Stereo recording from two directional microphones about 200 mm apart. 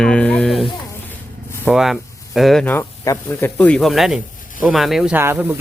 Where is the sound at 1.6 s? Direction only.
Centre (ahead or behind).